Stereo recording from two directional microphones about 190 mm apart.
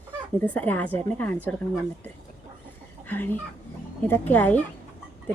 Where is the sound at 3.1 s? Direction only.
10° left (ahead or behind).